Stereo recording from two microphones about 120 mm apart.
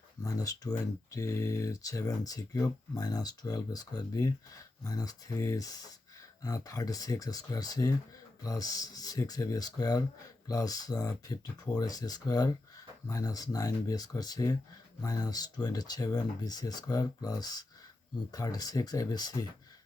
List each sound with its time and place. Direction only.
0.2 s speech: 30° left (ahead or behind)